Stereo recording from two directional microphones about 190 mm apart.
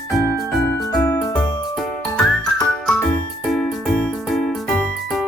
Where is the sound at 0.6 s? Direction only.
15° left (ahead or behind).